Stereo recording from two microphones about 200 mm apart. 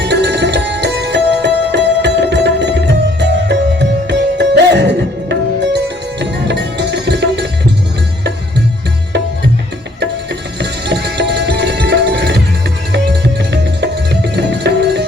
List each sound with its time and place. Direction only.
0.0 s music: 60° right (ahead or behind)
10.6 s music: 60° right (ahead or behind)